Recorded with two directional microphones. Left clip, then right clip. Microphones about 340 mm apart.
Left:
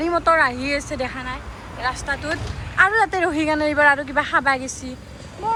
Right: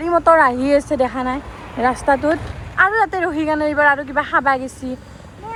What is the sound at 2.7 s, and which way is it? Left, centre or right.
Speech, centre.